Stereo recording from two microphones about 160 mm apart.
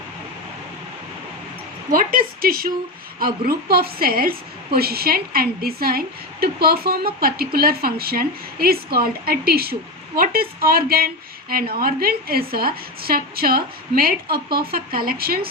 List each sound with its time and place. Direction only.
1.9 s a woman's voice: 60° right (ahead or behind)